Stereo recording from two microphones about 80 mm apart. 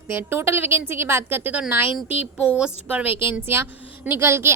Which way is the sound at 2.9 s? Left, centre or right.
Right.